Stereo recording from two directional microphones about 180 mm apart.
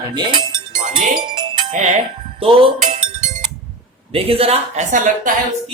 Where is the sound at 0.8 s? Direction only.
50° right (ahead or behind).